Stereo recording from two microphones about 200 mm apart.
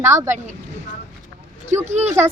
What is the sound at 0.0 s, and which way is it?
Speech, 15° right (ahead or behind).